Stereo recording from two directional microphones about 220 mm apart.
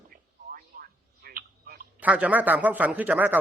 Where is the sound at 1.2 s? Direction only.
40° right (ahead or behind).